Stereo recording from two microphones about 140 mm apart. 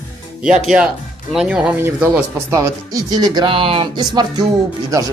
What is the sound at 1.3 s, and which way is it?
Speech, 5° right (ahead or behind).